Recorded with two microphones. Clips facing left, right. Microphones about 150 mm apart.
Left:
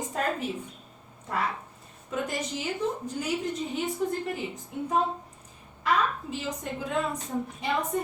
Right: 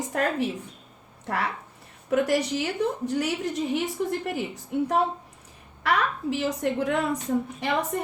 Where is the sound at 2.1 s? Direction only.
70° right (ahead or behind).